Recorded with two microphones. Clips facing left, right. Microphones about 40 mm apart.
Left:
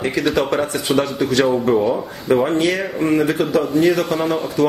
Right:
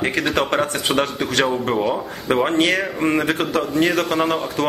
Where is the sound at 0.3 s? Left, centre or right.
Right.